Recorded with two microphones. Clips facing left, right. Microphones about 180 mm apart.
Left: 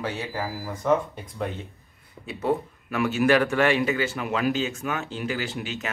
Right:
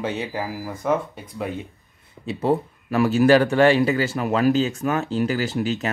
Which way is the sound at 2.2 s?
35° right (ahead or behind).